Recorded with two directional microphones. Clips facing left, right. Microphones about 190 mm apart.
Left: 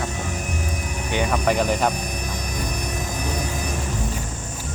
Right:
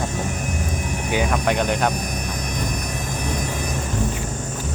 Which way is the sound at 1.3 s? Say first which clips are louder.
Left 3 dB; 5° left (ahead or behind).